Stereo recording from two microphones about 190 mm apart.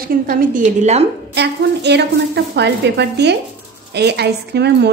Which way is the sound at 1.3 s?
65° right (ahead or behind).